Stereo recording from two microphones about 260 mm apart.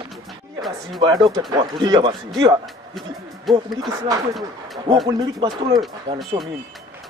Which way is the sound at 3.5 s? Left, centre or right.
Centre.